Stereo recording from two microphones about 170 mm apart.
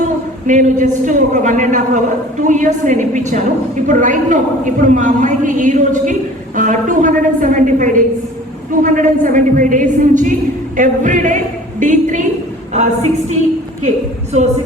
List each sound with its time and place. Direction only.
0.4 s a woman's voice: 50° right (ahead or behind)